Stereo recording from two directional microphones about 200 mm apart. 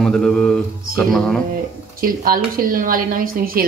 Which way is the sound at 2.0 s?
45° right (ahead or behind).